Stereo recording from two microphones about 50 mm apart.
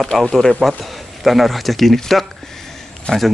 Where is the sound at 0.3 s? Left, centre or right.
Centre.